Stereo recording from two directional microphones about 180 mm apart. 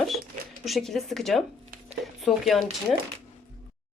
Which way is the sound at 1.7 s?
55° right (ahead or behind).